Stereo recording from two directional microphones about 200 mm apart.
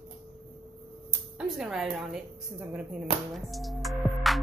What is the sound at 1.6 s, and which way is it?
A woman's voice, 5° right (ahead or behind).